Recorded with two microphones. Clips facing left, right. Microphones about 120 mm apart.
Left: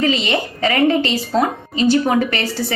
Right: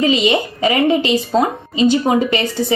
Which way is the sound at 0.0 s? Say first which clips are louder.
Right 3 dB; 15° right (ahead or behind).